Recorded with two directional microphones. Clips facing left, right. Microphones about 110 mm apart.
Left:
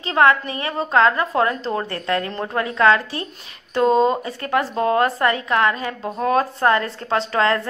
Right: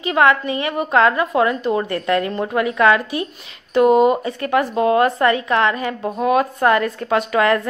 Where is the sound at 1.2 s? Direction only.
35° left (ahead or behind).